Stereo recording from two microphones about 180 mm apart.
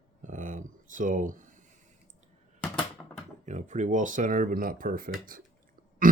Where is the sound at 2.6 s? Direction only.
5° left (ahead or behind).